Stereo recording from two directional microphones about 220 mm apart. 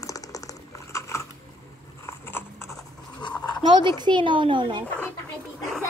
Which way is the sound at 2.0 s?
10° left (ahead or behind).